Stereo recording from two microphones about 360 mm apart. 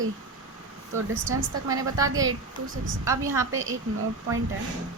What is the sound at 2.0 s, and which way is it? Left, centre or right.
A woman's voice, centre.